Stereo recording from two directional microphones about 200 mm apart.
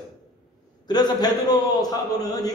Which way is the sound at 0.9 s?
20° left (ahead or behind).